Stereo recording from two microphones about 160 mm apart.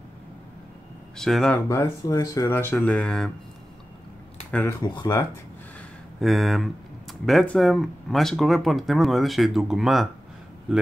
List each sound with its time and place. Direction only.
1.1 s speech: 5° left (ahead or behind)
1.7 s speech: 20° left (ahead or behind)
4.5 s speech: 10° left (ahead or behind)
4.8 s speech: 25° left (ahead or behind)
6.2 s speech: centre (ahead or behind)